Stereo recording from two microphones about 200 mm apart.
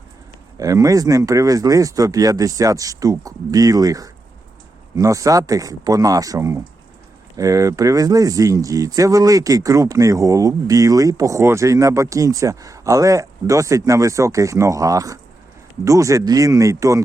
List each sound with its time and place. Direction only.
0.5 s speech: 15° right (ahead or behind)